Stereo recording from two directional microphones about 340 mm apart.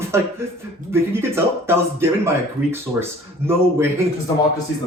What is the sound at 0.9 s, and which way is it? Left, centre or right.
Speech, centre.